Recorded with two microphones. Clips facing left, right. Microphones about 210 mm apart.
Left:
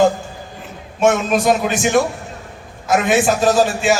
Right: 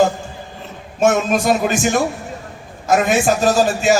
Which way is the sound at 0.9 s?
45° right (ahead or behind).